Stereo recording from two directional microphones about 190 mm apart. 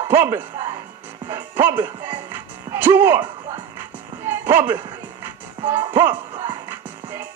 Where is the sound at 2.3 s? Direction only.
10° right (ahead or behind).